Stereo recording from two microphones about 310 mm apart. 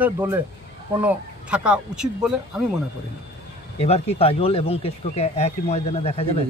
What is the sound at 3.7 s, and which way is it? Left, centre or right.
Speech, centre.